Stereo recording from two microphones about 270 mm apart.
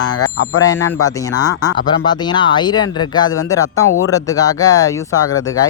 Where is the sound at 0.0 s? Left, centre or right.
Left.